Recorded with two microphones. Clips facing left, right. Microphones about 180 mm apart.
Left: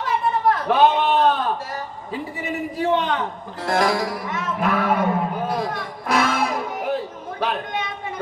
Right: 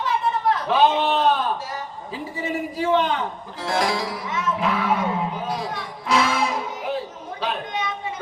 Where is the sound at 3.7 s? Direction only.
50° left (ahead or behind).